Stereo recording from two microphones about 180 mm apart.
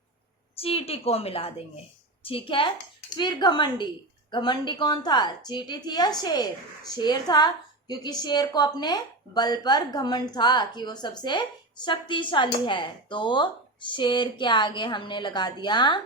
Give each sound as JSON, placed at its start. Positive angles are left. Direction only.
{"t": 0.5, "sound": "a woman's voice", "side_deg": 30}